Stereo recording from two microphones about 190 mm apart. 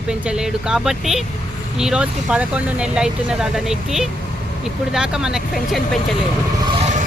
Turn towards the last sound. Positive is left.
turn(degrees=0)  # may be behind; listen again after turning